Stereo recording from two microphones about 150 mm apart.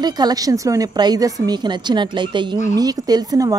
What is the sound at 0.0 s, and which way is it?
A woman's voice, 25° right (ahead or behind).